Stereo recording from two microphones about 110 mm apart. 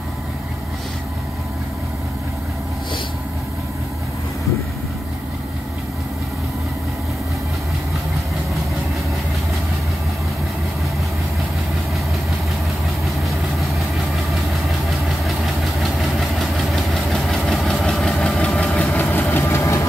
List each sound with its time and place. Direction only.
15.8 s vehicle: centre (ahead or behind)
19.0 s vehicle: 20° left (ahead or behind)